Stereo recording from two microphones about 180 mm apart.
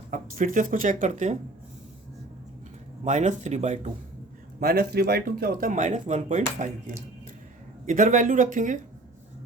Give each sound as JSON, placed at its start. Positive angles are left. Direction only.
{"t": 0.1, "sound": "speech", "side_deg": -45}
{"t": 3.0, "sound": "speech", "side_deg": -40}
{"t": 4.6, "sound": "speech", "side_deg": -60}